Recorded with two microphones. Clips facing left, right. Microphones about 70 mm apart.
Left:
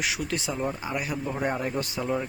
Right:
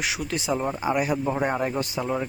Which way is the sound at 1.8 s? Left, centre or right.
Centre.